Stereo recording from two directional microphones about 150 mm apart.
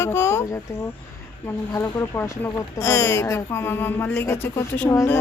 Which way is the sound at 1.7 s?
15° left (ahead or behind).